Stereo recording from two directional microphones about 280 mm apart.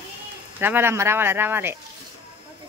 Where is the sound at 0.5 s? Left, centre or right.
Centre.